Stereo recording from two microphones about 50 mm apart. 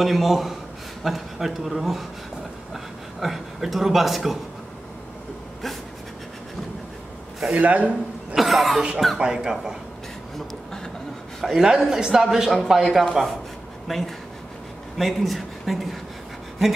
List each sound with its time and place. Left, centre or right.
0.0 s a man's voice: centre
7.5 s a man's voice: right
8.4 s speech: centre
9.2 s a man's voice: centre
11.4 s a man's voice: centre